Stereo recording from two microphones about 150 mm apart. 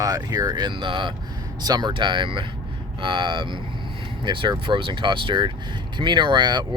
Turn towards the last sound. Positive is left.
turn(degrees=-30)  # may be behind; listen again after turning